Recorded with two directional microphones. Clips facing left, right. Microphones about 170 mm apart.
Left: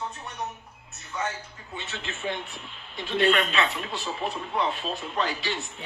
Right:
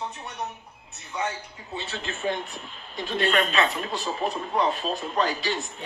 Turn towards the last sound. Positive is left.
turn(degrees=-40)  # may be behind; listen again after turning